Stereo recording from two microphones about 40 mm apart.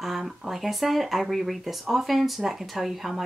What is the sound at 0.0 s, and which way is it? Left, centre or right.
Speech, centre.